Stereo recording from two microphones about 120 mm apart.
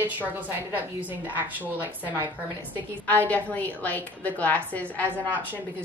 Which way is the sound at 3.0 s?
15° left (ahead or behind).